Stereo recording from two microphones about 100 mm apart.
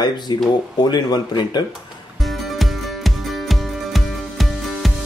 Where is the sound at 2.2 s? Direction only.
Centre (ahead or behind).